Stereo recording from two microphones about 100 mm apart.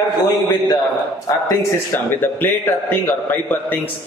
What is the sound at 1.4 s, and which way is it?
A man's voice, 25° left (ahead or behind).